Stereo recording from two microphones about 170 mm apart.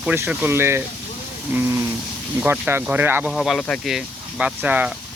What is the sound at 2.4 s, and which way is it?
Speech, 10° right (ahead or behind).